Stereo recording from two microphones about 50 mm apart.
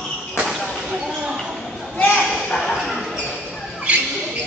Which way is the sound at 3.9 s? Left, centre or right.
Right.